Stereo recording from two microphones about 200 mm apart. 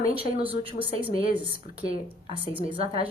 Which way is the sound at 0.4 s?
25° right (ahead or behind).